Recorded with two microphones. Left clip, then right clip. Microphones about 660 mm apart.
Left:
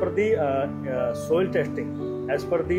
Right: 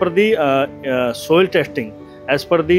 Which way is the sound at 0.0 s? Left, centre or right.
Right.